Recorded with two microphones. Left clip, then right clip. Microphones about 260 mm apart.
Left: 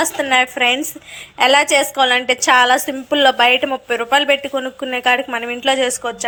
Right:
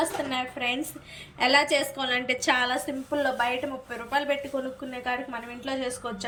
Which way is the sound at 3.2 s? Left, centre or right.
Left.